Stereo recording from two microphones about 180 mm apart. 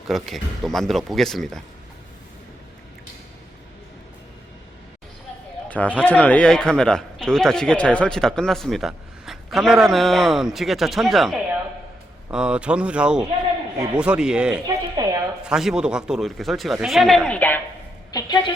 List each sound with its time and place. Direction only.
0.1 s speech: centre (ahead or behind)
5.6 s speech: 10° left (ahead or behind)
14.9 s a sound: 20° right (ahead or behind)
15.4 s speech: 5° right (ahead or behind)
18.1 s a woman's voice: 20° left (ahead or behind)